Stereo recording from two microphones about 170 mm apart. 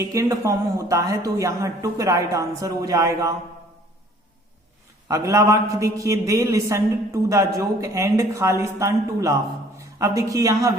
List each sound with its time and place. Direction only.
0.0 s speech: 20° right (ahead or behind)
5.0 s a man's voice: 20° right (ahead or behind)